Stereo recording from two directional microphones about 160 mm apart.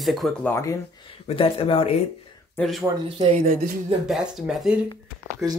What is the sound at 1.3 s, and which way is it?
Speech, 35° left (ahead or behind).